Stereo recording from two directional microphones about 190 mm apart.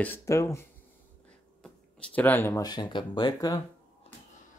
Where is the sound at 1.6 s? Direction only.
5° left (ahead or behind).